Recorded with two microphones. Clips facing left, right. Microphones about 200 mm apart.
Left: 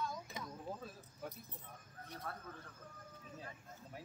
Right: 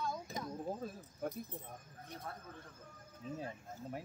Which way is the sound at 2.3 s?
15° right (ahead or behind).